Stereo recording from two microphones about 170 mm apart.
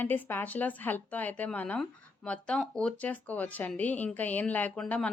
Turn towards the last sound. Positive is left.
turn(degrees=5)  # may be behind; listen again after turning